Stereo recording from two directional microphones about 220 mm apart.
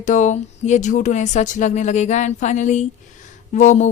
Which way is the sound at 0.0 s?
35° left (ahead or behind).